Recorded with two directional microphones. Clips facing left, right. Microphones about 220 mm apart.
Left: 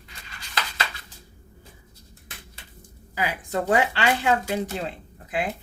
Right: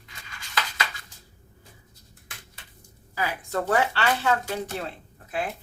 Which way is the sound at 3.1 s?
15° left (ahead or behind).